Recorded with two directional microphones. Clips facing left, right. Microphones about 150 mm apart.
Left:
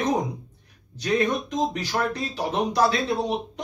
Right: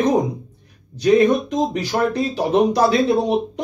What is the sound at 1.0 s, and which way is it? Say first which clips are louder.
Speech: right 9 dB; 15° right (ahead or behind).